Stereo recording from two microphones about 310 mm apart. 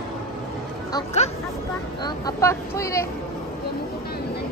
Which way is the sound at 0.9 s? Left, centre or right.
Centre.